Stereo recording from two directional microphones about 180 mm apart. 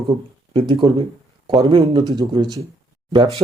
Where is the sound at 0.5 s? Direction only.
30° right (ahead or behind).